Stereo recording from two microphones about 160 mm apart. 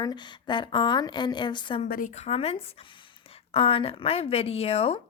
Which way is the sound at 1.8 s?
60° left (ahead or behind).